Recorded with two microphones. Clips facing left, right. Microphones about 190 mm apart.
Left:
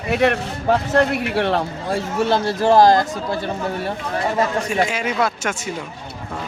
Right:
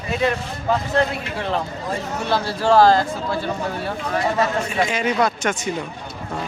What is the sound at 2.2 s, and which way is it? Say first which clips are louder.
Speech: left 1 dB; 20° left (ahead or behind).